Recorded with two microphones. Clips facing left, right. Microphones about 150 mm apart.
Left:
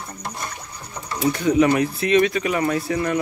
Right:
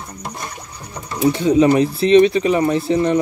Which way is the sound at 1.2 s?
25° right (ahead or behind).